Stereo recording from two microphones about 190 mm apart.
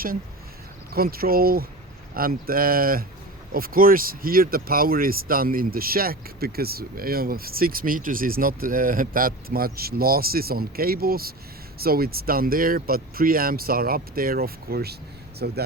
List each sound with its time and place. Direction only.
0.9 s speech: 50° right (ahead or behind)